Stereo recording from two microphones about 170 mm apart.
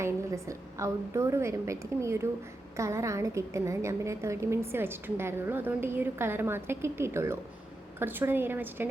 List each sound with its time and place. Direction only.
0.0 s a woman's voice: 20° right (ahead or behind)